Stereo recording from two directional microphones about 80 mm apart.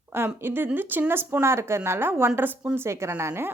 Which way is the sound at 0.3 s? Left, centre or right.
Right.